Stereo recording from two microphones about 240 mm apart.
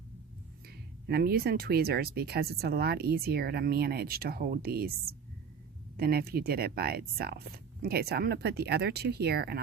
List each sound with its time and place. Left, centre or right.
0.7 s speech: right